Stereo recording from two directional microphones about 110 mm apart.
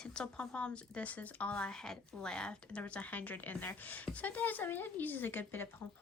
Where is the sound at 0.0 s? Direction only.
10° left (ahead or behind).